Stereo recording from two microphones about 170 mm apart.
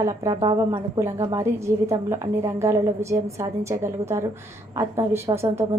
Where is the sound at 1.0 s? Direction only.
20° right (ahead or behind).